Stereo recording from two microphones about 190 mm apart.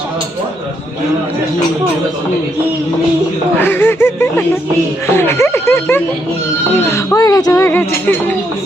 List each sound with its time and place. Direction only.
3.6 s speech: 10° left (ahead or behind)